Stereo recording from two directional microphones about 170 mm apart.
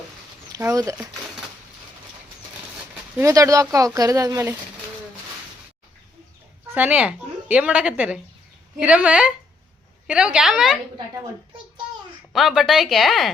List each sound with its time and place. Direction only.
0.5 s speech: 20° right (ahead or behind)
3.2 s speech: 20° right (ahead or behind)
6.7 s a woman's voice: 10° right (ahead or behind)
12.3 s a woman's voice: centre (ahead or behind)